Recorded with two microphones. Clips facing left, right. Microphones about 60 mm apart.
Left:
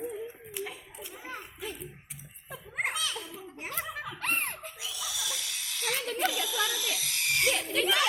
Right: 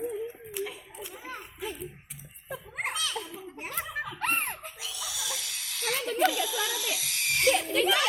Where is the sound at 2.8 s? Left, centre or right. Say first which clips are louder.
Left 1 dB; centre.